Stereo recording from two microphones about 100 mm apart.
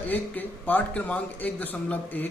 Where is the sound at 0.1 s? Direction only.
15° left (ahead or behind).